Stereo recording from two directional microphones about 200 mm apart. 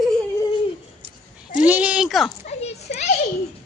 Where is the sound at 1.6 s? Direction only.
5° right (ahead or behind).